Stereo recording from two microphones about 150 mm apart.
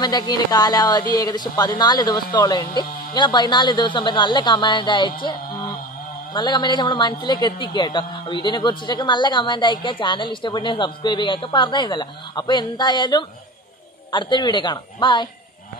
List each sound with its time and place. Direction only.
0.0 s speech: 25° left (ahead or behind)
6.3 s a man's voice: 30° left (ahead or behind)